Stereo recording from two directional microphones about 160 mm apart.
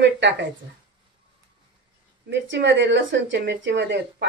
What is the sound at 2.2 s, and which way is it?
Speech, 90° right.